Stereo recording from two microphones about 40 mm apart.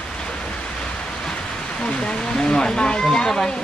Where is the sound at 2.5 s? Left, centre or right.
Centre.